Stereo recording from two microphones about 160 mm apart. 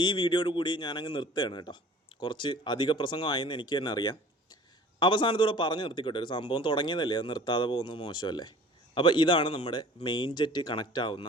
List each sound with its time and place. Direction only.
0.0 s speech: 30° left (ahead or behind)